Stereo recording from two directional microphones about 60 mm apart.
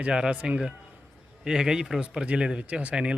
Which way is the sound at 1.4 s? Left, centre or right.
Centre.